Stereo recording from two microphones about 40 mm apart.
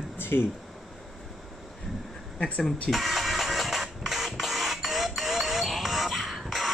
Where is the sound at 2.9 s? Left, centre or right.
Centre.